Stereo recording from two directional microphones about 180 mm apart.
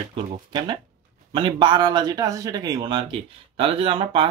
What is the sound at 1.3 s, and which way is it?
Speech, 25° right (ahead or behind).